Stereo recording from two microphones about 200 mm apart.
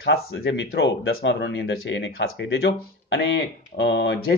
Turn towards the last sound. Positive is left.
turn(degrees=60)  # may be behind; listen again after turning